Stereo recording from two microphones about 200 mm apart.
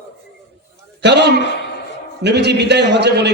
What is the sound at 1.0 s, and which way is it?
A man's voice, 60° right (ahead or behind).